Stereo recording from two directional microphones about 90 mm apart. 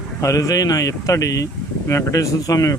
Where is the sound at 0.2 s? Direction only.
40° left (ahead or behind).